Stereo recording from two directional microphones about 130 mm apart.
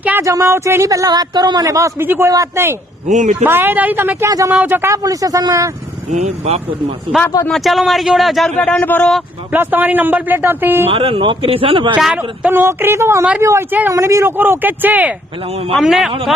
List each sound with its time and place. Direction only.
0.0 s speech: 15° right (ahead or behind)
3.1 s speech: 65° right (ahead or behind)
3.4 s speech: 15° right (ahead or behind)
4.3 s speech: 25° right (ahead or behind)
4.5 s speech: 15° right (ahead or behind)
6.1 s speech: 60° right (ahead or behind)
7.4 s speech: centre (ahead or behind)
9.5 s speech: 15° right (ahead or behind)
10.8 s a man's voice: 45° right (ahead or behind)
11.9 s speech: 5° right (ahead or behind)
15.7 s speech: centre (ahead or behind)